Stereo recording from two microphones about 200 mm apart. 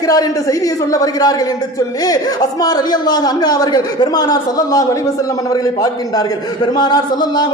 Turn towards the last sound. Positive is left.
turn(degrees=20)  # may be behind; listen again after turning